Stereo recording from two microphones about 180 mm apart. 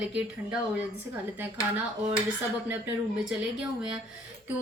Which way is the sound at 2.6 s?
10° right (ahead or behind).